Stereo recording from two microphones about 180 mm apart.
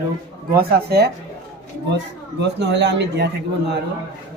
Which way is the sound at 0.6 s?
65° right (ahead or behind).